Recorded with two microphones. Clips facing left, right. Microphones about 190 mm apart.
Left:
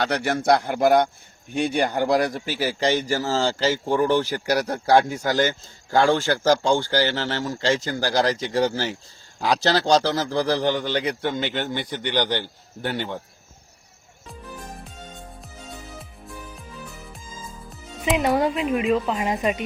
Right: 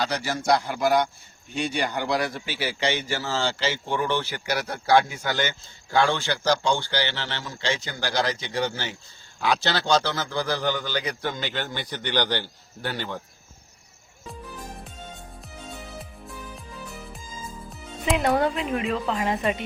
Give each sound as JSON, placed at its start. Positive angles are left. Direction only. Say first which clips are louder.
{"t": 0.0, "sound": "a man's voice", "louder": "left 4 dB", "side_deg": 60}
{"t": 18.0, "sound": "a woman's voice", "louder": "left 2 dB", "side_deg": 5}